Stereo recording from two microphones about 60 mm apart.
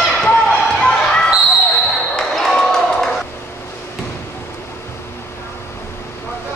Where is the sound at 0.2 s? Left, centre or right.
Centre.